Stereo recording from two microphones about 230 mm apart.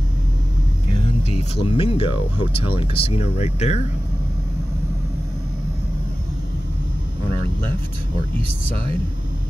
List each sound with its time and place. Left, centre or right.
1.3 s speech: left